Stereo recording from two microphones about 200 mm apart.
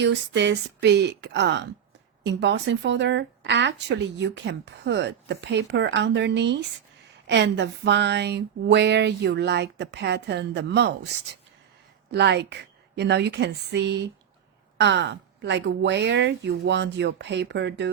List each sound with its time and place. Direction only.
0.0 s speech: 60° right (ahead or behind)
12.1 s speech: 60° right (ahead or behind)